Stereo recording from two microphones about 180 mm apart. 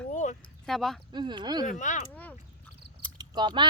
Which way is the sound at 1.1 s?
25° right (ahead or behind).